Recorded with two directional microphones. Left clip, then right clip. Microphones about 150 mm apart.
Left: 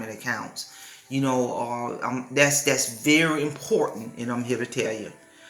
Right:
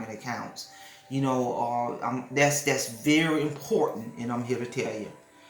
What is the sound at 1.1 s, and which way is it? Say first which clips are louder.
Speech: left 3 dB; 10° left (ahead or behind).